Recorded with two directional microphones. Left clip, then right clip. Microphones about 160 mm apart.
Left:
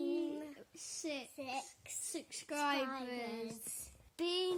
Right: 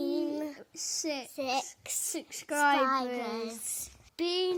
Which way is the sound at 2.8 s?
65° right (ahead or behind).